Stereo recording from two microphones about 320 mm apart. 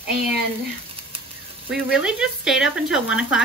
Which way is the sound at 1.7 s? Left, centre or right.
Centre.